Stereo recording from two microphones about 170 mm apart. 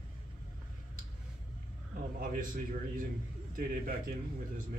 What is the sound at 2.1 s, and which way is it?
Speech, 55° right (ahead or behind).